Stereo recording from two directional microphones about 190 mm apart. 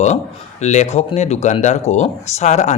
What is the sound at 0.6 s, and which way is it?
Speech, 35° left (ahead or behind).